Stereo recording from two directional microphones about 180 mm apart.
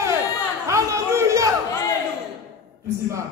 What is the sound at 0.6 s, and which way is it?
Chatter, 15° right (ahead or behind).